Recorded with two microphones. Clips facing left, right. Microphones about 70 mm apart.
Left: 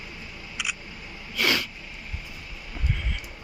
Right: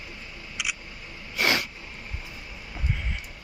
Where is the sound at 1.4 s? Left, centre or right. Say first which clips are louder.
Even; right.